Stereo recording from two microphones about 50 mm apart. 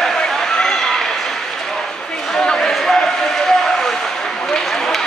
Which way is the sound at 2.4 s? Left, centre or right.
Centre.